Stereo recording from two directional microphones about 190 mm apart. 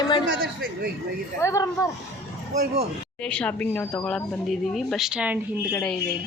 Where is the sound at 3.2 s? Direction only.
5° left (ahead or behind).